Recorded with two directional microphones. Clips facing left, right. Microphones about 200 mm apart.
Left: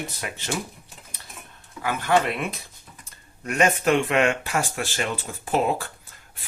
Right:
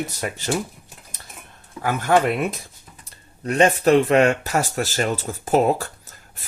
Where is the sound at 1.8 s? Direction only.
45° right (ahead or behind).